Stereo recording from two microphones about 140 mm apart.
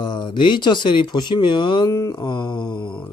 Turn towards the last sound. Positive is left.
turn(degrees=30)  # may be behind; listen again after turning